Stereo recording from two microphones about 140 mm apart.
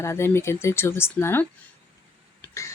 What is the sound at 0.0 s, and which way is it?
Speech, 20° left (ahead or behind).